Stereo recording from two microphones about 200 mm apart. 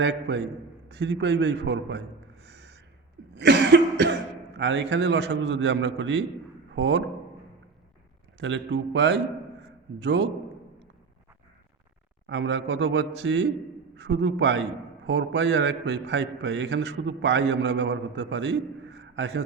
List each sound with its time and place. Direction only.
0.0 s a man's voice: 60° right (ahead or behind)
8.4 s a man's voice: 65° right (ahead or behind)
12.3 s a man's voice: 65° right (ahead or behind)